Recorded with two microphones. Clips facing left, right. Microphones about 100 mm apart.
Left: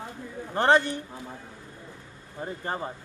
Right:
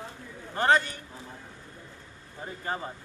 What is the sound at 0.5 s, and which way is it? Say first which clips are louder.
Speech: left 2 dB; 30° left (ahead or behind).